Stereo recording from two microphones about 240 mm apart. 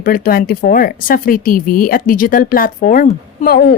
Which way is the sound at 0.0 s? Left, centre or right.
Left.